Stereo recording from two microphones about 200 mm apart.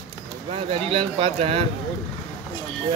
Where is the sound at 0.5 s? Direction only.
25° right (ahead or behind).